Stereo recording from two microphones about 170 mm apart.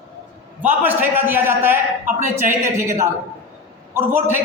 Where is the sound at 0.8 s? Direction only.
10° right (ahead or behind).